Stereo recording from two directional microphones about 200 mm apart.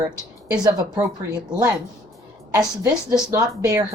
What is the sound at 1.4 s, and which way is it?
A woman's voice, 20° right (ahead or behind).